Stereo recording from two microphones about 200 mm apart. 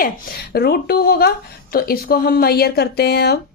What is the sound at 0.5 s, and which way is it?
A woman's voice, 50° left (ahead or behind).